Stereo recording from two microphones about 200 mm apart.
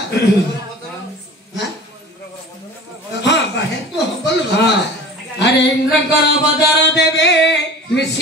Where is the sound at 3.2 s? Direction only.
60° left (ahead or behind).